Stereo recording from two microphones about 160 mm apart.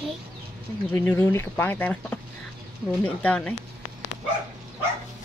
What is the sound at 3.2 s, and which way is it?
Speech, 5° left (ahead or behind).